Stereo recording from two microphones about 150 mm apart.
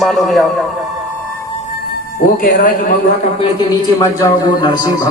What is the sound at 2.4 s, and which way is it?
Speech, 90° left.